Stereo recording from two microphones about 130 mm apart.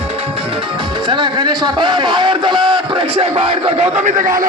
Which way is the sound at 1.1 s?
35° right (ahead or behind).